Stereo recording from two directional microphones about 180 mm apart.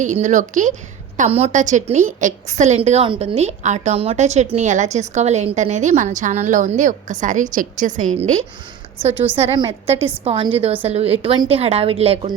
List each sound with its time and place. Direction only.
0.0 s a woman's voice: 45° right (ahead or behind)